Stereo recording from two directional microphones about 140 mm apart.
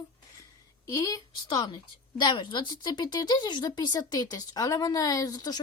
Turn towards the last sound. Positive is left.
turn(degrees=30)  # may be behind; listen again after turning